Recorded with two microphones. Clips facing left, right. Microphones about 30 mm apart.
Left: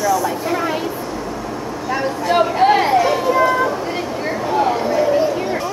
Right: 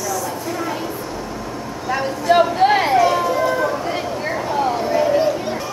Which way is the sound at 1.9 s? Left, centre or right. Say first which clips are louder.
Right 1 dB; centre.